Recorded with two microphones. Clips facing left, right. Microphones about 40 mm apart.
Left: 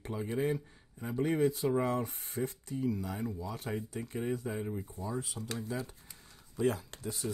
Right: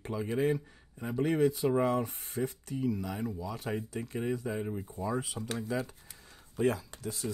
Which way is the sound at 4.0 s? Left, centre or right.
Right.